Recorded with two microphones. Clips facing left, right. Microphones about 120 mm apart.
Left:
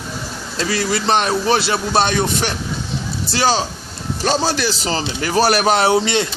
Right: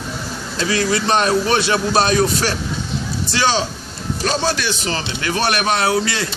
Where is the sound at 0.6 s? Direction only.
30° left (ahead or behind).